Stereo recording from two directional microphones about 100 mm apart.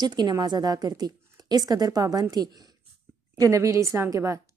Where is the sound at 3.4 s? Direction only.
30° right (ahead or behind).